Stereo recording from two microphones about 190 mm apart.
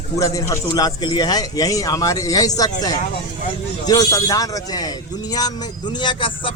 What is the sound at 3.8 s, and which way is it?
A man's voice, 20° left (ahead or behind).